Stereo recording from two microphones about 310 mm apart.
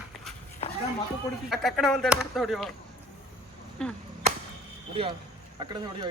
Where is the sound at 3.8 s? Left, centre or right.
Centre.